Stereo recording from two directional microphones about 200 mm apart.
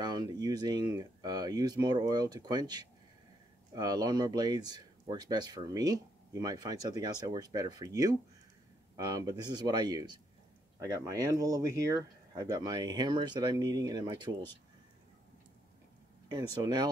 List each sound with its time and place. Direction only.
0.0 s speech: 20° right (ahead or behind)
16.6 s speech: 20° right (ahead or behind)